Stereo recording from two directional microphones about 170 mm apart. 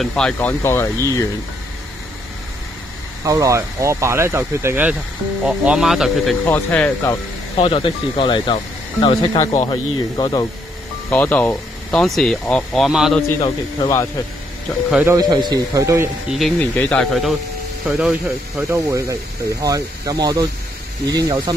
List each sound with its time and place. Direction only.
0.0 s speech: 5° left (ahead or behind)
3.3 s speech: 20° right (ahead or behind); by 6.3 s centre (ahead or behind)
6.4 s speech: 10° left (ahead or behind)
7.5 s speech: 35° left (ahead or behind)
11.1 s speech: 10° left (ahead or behind)
13.4 s speech: 20° left (ahead or behind)
14.9 s speech: 10° right (ahead or behind)
15.1 s speech: 20° right (ahead or behind)
16.3 s speech: centre (ahead or behind)
18.7 s speech: 20° right (ahead or behind)